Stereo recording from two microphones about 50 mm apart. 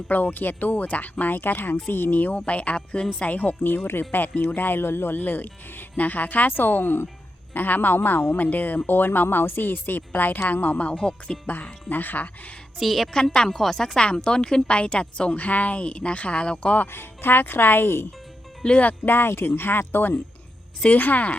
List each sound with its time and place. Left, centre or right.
0.1 s speech: left
2.5 s a woman's voice: left
10.9 s speech: centre
11.4 s speech: left
12.8 s a woman's voice: centre
13.1 s a woman's voice: centre
16.7 s speech: left
18.8 s speech: left